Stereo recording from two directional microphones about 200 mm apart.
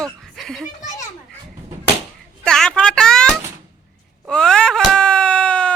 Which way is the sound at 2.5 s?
5° left (ahead or behind).